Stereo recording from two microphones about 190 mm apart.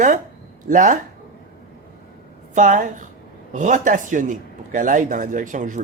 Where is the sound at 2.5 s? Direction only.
40° right (ahead or behind).